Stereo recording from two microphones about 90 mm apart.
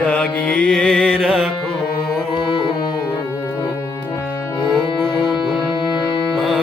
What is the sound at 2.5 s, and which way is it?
Music, 65° left (ahead or behind).